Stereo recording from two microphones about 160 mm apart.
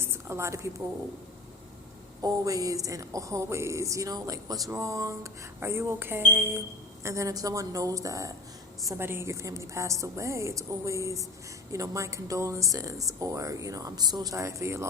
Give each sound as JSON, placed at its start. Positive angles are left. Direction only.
{"t": 0.0, "sound": "a woman's voice", "side_deg": -15}
{"t": 2.2, "sound": "speech", "side_deg": -20}
{"t": 4.7, "sound": "a sound", "side_deg": -20}
{"t": 7.0, "sound": "speech", "side_deg": -20}